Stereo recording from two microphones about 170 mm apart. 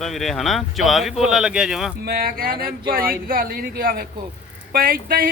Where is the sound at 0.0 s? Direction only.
Centre (ahead or behind).